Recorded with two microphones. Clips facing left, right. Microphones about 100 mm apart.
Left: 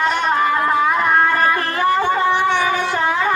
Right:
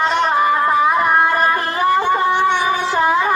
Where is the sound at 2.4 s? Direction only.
15° right (ahead or behind).